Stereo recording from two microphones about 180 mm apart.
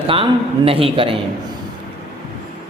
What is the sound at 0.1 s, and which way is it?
Speech, 30° right (ahead or behind).